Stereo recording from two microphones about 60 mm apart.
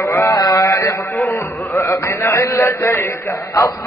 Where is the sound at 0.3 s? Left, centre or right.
Left.